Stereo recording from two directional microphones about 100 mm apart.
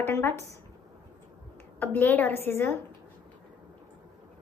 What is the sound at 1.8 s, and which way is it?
A woman's voice, 20° left (ahead or behind).